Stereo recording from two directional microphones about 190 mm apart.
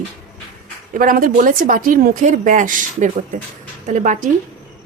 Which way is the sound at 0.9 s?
45° right (ahead or behind).